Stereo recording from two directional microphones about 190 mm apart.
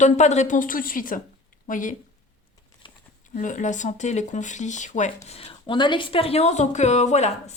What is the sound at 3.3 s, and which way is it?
Speech, 40° left (ahead or behind).